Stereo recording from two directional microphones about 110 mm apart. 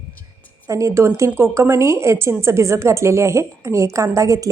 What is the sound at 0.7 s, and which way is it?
A woman's voice, 30° right (ahead or behind).